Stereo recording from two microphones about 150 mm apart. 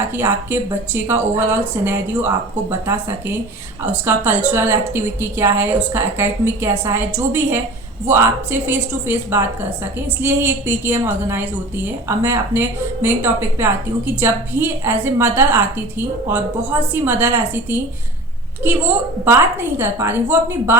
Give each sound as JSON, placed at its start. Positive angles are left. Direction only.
{"t": 0.1, "sound": "a woman's voice", "side_deg": -15}